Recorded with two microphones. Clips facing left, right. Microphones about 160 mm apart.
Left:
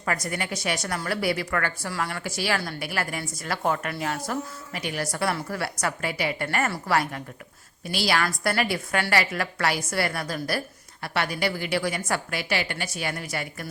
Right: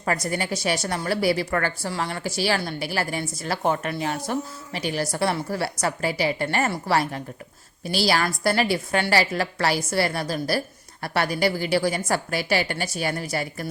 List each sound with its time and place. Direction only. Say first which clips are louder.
0.0 s a woman's voice: right 3 dB; 30° right (ahead or behind)